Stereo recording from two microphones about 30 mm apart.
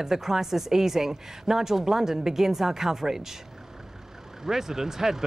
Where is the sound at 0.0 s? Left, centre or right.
Centre.